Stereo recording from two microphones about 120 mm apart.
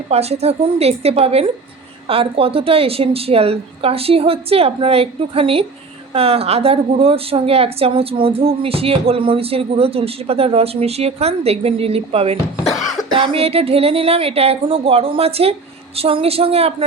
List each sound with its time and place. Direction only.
0.1 s a woman's voice: 60° right (ahead or behind)
12.6 s cough: centre (ahead or behind)
13.1 s a woman's voice: 50° right (ahead or behind)